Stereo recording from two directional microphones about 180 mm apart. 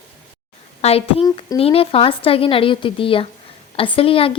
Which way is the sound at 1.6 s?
30° left (ahead or behind).